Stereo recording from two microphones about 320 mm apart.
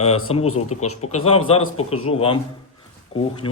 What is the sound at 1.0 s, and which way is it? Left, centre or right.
A man's voice, left.